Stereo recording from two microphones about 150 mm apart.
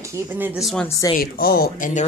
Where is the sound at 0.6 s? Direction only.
Centre (ahead or behind).